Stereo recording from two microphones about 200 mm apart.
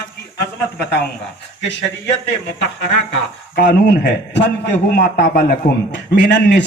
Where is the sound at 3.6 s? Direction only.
50° left (ahead or behind).